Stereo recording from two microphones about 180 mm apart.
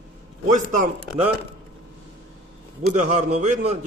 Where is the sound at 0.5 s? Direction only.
45° right (ahead or behind).